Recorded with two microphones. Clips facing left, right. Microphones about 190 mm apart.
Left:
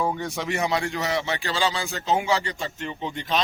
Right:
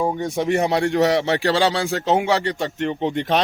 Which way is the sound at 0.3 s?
50° right (ahead or behind).